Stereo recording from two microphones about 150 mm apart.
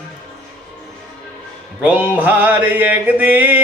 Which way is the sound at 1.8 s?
10° right (ahead or behind).